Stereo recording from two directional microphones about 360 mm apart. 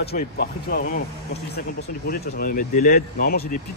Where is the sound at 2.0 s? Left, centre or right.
Left.